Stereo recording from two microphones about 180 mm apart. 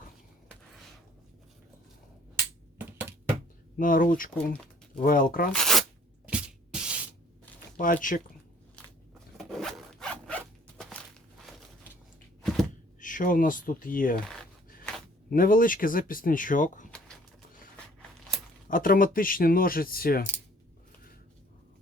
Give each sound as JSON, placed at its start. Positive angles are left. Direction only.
{"t": 2.7, "sound": "a sound", "side_deg": -10}
{"t": 3.8, "sound": "speech", "side_deg": 50}
{"t": 5.5, "sound": "speech", "side_deg": 0}
{"t": 6.2, "sound": "music", "side_deg": -5}
{"t": 7.8, "sound": "speech", "side_deg": 50}
{"t": 9.4, "sound": "zipper", "side_deg": 0}
{"t": 12.4, "sound": "a sound", "side_deg": 0}
{"t": 13.0, "sound": "speech", "side_deg": 50}
{"t": 15.3, "sound": "speech", "side_deg": 50}
{"t": 18.7, "sound": "speech", "side_deg": 50}